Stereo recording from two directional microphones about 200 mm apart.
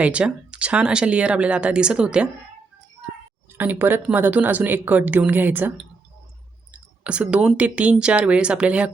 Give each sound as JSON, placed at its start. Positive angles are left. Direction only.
{"t": 0.0, "sound": "a woman's voice", "side_deg": -5}
{"t": 3.6, "sound": "a woman's voice", "side_deg": -10}